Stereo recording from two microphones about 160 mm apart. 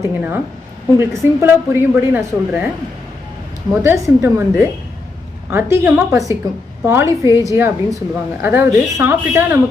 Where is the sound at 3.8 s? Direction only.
15° right (ahead or behind).